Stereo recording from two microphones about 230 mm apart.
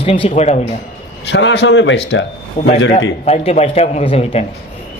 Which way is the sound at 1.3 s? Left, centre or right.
Left.